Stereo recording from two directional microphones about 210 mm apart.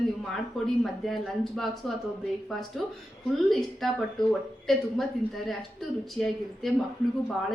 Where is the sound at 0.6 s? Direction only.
Centre (ahead or behind).